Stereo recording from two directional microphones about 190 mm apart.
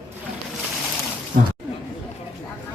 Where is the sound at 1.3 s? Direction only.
45° right (ahead or behind).